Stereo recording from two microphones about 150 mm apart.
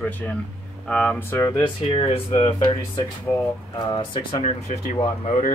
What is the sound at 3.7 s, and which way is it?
Speech, 35° left (ahead or behind).